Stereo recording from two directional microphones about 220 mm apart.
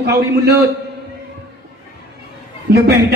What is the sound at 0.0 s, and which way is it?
Speech, 45° right (ahead or behind).